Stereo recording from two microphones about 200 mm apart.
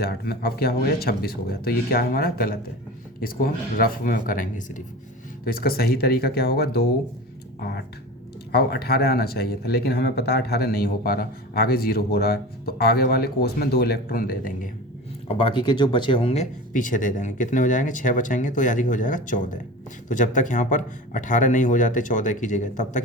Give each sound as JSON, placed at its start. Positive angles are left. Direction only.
{"t": 0.0, "sound": "speech", "side_deg": 50}
{"t": 15.3, "sound": "speech", "side_deg": 25}